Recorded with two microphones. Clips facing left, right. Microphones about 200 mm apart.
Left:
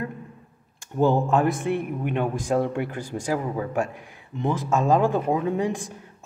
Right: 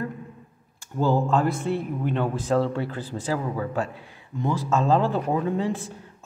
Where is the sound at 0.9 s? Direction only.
20° left (ahead or behind).